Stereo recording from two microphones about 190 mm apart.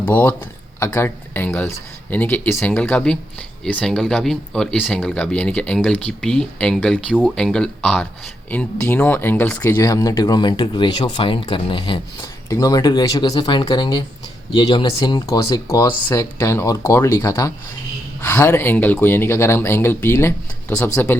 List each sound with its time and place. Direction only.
0.0 s speech: 10° left (ahead or behind)